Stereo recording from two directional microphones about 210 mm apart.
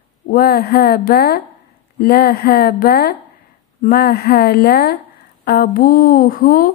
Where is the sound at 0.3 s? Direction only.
45° left (ahead or behind).